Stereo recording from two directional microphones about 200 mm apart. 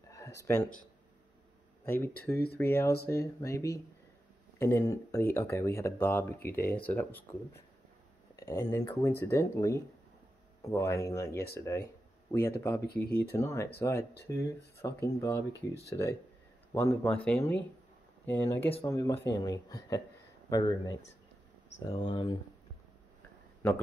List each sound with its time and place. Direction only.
0.1 s a sound: 15° left (ahead or behind)
1.9 s speech: 10° left (ahead or behind)
8.4 s speech: 15° left (ahead or behind)
12.8 s speech: 50° left (ahead or behind)
13.3 s speech: 15° left (ahead or behind)
16.7 s speech: 10° left (ahead or behind)